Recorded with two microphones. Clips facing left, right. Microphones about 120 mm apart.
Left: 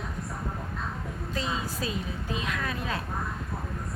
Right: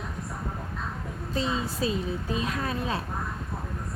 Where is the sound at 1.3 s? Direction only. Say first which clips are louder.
Right 4 dB; 30° right (ahead or behind).